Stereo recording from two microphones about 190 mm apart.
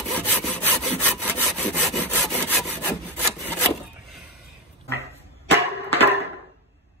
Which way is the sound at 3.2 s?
10° left (ahead or behind).